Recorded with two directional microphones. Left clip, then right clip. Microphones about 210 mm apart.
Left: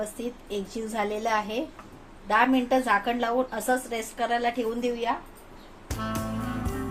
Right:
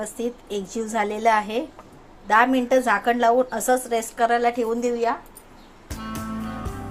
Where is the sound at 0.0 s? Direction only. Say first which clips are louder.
Right 5 dB; 25° right (ahead or behind).